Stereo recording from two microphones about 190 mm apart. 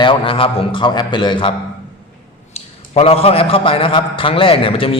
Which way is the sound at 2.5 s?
30° left (ahead or behind).